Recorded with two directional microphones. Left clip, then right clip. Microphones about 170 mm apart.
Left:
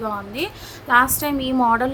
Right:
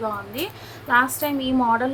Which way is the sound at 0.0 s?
25° left (ahead or behind).